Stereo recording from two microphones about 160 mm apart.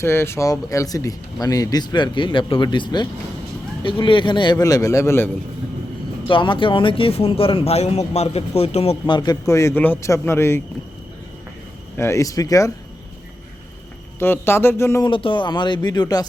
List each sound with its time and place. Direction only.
0.0 s speech: 15° left (ahead or behind)
6.2 s a man's voice: 30° left (ahead or behind); by 10.6 s 15° left (ahead or behind)
11.9 s speech: 20° left (ahead or behind)
14.2 s a man's voice: 15° left (ahead or behind)
15.0 s speech: 30° left (ahead or behind)